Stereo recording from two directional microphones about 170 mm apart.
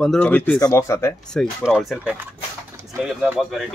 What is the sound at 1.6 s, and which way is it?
Speech, centre (ahead or behind).